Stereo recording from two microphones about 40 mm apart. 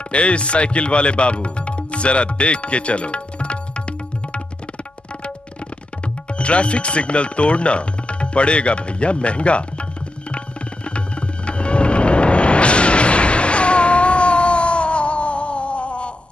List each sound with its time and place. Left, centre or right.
0.1 s speech: left
6.3 s speech: left
10.9 s music: left